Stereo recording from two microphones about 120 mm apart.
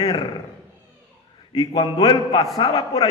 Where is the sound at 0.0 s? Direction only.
35° left (ahead or behind).